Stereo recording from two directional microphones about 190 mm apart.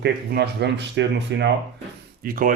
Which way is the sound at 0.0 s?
60° right (ahead or behind).